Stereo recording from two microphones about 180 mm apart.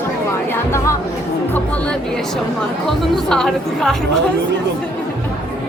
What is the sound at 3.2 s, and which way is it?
Speech, 5° left (ahead or behind).